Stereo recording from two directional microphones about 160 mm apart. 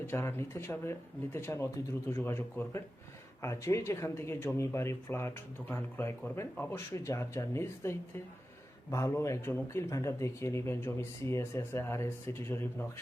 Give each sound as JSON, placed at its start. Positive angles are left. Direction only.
{"t": 0.0, "sound": "speech", "side_deg": 15}